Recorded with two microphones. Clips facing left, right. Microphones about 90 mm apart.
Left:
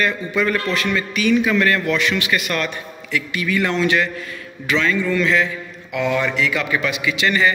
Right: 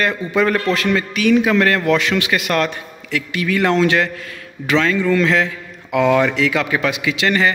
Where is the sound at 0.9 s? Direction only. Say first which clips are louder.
Right 2 dB; 80° right.